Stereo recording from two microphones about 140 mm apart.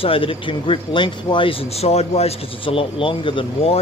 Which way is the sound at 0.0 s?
40° left (ahead or behind).